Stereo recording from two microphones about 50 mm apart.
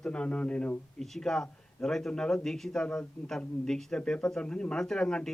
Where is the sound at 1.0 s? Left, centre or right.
Centre.